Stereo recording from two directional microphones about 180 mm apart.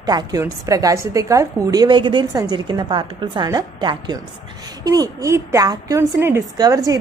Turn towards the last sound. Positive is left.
turn(degrees=-20)  # may be behind; listen again after turning